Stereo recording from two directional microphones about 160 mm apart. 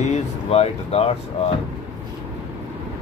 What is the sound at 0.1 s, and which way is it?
Speech, 40° left (ahead or behind).